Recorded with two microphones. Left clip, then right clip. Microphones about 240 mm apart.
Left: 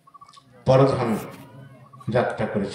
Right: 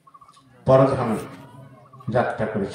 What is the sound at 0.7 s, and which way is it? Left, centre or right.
Speech, left.